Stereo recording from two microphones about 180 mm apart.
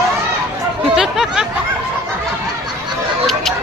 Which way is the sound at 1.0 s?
5° right (ahead or behind).